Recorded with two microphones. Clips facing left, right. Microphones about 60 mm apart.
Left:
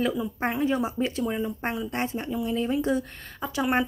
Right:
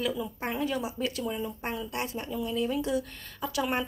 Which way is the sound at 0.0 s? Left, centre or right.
Left.